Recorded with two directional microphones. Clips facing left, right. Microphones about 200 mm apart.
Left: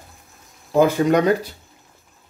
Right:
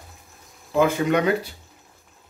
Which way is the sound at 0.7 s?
40° left (ahead or behind).